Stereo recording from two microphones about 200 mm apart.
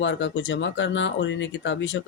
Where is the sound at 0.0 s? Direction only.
65° left (ahead or behind).